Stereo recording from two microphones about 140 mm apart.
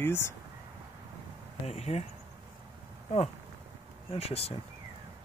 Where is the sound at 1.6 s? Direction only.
50° left (ahead or behind).